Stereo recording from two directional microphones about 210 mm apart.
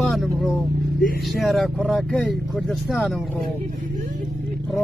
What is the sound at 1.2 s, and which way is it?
Speech, centre (ahead or behind).